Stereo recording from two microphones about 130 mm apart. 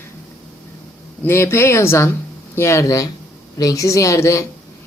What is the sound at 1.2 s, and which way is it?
Speech, 20° left (ahead or behind).